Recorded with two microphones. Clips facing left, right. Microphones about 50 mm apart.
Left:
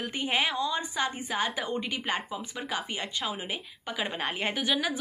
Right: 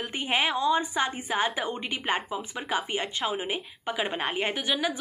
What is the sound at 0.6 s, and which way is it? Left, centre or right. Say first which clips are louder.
A woman's voice: right 4 dB; right.